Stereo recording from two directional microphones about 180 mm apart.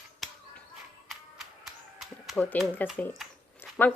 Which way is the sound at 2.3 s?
10° left (ahead or behind).